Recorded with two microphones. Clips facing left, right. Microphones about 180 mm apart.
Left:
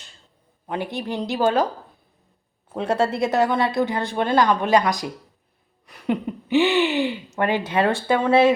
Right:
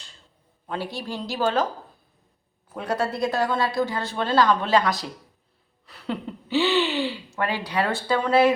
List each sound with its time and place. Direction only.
0.7 s a woman's voice: 20° left (ahead or behind)
2.7 s a woman's voice: 25° left (ahead or behind)